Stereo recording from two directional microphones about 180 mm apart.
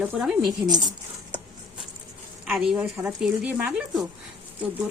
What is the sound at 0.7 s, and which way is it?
Speech, 25° right (ahead or behind).